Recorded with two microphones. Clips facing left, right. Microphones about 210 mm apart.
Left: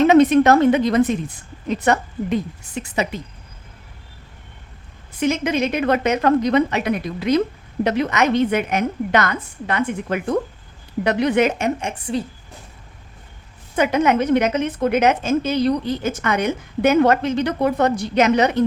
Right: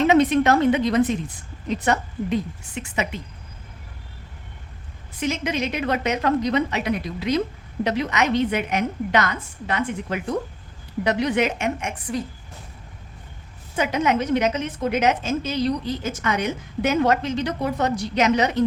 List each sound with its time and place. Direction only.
0.1 s a woman's voice: 45° left (ahead or behind)
2.7 s a woman's voice: 35° left (ahead or behind)
5.2 s a woman's voice: 50° left (ahead or behind); by 12.2 s 30° left (ahead or behind)
13.7 s a woman's voice: 55° left (ahead or behind)